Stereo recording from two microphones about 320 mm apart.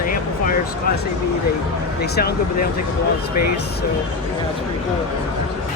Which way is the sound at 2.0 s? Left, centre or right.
Left.